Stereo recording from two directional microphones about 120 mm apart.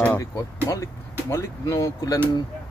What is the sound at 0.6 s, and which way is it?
Speech, 30° left (ahead or behind).